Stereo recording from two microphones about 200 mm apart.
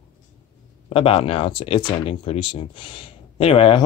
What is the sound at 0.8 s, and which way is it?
Speech, 30° left (ahead or behind).